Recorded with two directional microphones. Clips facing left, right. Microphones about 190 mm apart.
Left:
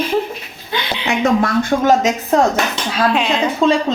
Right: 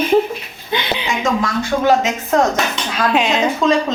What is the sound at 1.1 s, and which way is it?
Speech, 60° left (ahead or behind).